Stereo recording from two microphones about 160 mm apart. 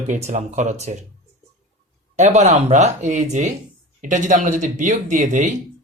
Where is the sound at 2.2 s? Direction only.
45° right (ahead or behind).